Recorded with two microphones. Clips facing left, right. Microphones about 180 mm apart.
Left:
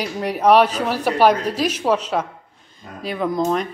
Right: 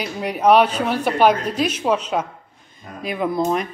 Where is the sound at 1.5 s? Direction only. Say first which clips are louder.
Even; 35° left (ahead or behind).